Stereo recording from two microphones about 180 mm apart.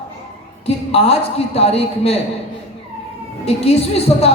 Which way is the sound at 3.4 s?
35° left (ahead or behind).